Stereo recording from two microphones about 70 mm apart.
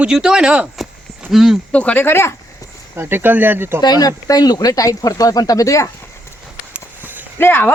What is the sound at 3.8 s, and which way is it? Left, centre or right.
Speech, left.